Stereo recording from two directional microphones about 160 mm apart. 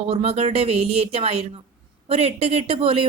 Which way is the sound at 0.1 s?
40° right (ahead or behind).